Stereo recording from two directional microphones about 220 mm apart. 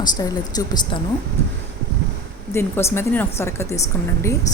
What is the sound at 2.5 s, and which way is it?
A woman's voice, 10° left (ahead or behind).